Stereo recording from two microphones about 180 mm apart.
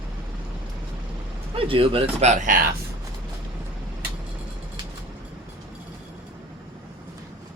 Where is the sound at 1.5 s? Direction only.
30° right (ahead or behind).